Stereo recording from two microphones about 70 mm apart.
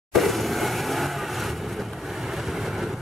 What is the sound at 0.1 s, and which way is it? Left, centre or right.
Vehicle, centre.